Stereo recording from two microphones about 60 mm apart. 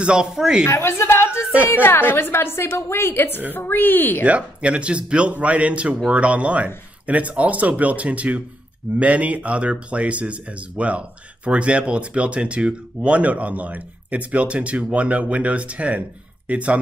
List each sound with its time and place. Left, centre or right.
0.0 s speech: centre
0.7 s a woman's voice: left
4.2 s speech: right